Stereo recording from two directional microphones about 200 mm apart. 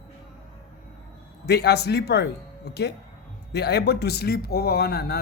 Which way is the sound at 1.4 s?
55° left (ahead or behind).